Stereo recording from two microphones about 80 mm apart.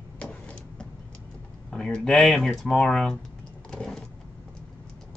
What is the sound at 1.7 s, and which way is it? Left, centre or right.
Speech, centre.